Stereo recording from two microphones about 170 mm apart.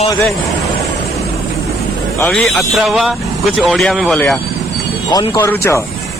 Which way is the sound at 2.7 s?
Centre (ahead or behind).